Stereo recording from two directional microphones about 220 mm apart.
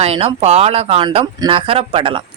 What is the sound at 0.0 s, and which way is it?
A woman's voice, 25° right (ahead or behind).